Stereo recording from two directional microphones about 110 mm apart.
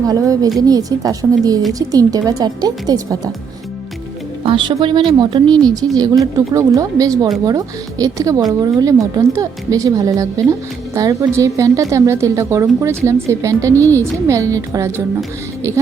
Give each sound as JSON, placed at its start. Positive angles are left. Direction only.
{"t": 0.1, "sound": "a woman's voice", "side_deg": -35}
{"t": 4.4, "sound": "a woman's voice", "side_deg": -50}